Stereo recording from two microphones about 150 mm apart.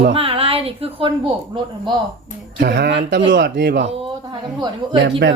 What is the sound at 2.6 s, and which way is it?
Speech, 90° right.